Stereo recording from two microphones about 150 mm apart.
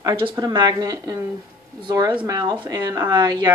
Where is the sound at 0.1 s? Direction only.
35° right (ahead or behind).